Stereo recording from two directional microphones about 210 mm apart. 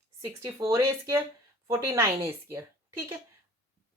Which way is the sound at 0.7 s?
15° right (ahead or behind).